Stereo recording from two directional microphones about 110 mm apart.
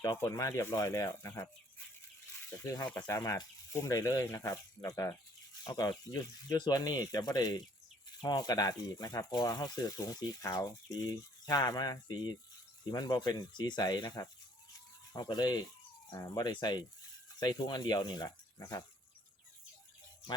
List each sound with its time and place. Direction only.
0.2 s speech: 30° left (ahead or behind)
3.0 s speech: 25° left (ahead or behind)